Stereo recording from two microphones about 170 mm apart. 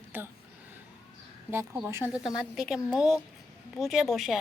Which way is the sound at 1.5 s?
10° right (ahead or behind).